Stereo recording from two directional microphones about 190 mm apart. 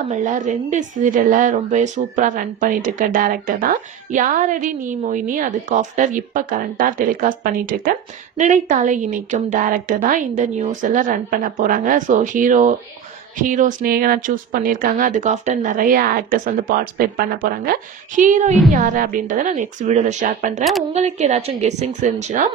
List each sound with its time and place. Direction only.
0.1 s a woman's voice: 40° right (ahead or behind)